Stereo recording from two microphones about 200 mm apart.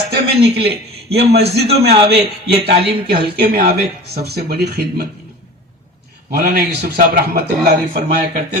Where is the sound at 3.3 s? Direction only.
50° right (ahead or behind).